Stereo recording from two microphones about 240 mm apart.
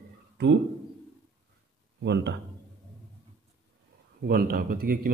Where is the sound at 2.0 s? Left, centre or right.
Right.